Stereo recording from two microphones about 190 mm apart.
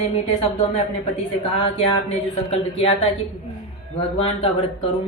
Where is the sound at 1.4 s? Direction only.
30° left (ahead or behind).